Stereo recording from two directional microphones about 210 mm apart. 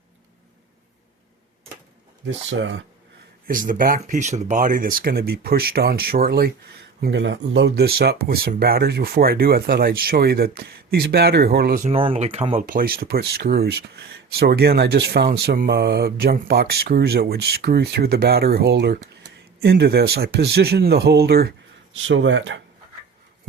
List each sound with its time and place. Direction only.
2.2 s speech: 65° right (ahead or behind)
3.4 s speech: 40° right (ahead or behind)
7.0 s speech: 60° right (ahead or behind)
11.9 s speech: 25° right (ahead or behind); by 21.5 s 50° right (ahead or behind)
22.0 s speech: 60° right (ahead or behind)